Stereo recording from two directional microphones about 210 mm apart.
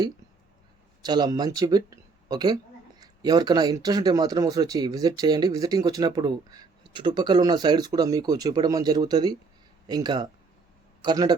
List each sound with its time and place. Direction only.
1.0 s speech: 20° right (ahead or behind)